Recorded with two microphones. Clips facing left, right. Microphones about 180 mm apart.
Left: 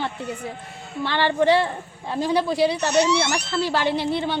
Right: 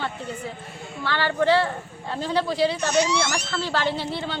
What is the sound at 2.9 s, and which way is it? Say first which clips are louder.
Speech: left 3 dB; 65° left (ahead or behind).